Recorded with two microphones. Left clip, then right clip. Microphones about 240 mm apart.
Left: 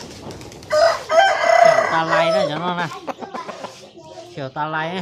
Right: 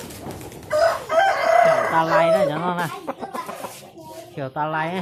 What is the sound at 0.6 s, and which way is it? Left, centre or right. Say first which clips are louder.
Chicken: left 3 dB; left.